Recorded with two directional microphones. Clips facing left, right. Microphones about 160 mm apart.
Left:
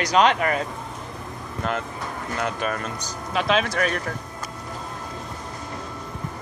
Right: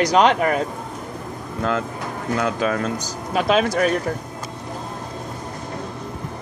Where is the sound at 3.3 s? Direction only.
5° right (ahead or behind).